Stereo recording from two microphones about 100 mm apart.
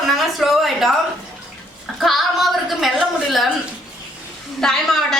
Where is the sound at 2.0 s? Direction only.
Centre (ahead or behind).